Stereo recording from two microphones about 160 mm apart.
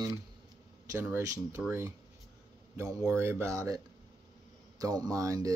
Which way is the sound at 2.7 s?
20° right (ahead or behind).